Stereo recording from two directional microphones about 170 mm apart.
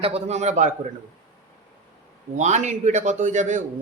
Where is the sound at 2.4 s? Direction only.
45° right (ahead or behind).